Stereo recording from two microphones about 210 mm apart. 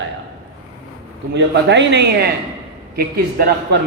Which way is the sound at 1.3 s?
55° right (ahead or behind).